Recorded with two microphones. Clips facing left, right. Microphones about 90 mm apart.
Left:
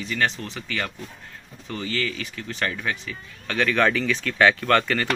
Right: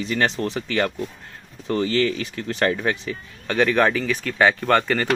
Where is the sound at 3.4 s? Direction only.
15° right (ahead or behind).